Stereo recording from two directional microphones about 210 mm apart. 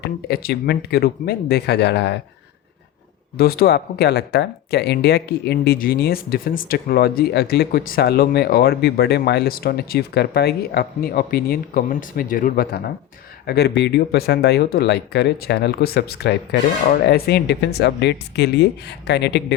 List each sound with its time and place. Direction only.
0.0 s speech: 50° left (ahead or behind)
3.3 s speech: 45° left (ahead or behind)